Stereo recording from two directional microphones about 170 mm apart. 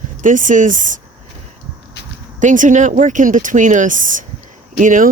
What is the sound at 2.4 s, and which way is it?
Speech, 50° right (ahead or behind).